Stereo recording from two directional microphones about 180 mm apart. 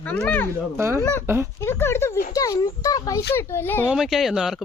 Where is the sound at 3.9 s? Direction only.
Centre (ahead or behind).